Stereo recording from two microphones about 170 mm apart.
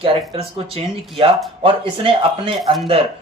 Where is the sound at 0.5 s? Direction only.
35° right (ahead or behind).